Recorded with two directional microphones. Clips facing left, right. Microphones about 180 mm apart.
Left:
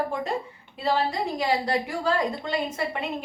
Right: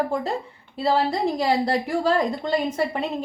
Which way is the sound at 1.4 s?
35° right (ahead or behind).